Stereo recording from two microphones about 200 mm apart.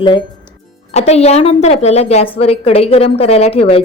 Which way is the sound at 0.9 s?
30° left (ahead or behind).